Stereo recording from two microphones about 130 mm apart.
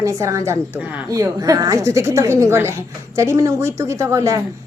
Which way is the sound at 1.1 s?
25° right (ahead or behind).